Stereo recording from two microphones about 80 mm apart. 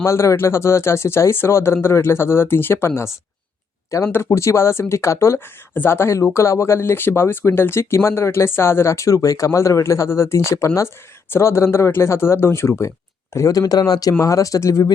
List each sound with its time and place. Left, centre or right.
0.0 s speech: left